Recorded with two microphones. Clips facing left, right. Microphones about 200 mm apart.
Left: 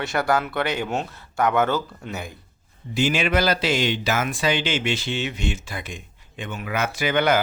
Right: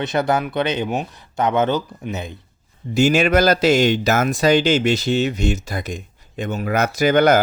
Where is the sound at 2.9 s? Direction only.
45° right (ahead or behind).